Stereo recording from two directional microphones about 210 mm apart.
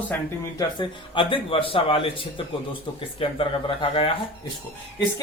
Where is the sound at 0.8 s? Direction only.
25° left (ahead or behind).